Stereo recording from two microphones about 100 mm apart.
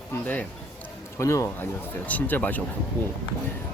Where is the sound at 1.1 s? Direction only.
30° left (ahead or behind).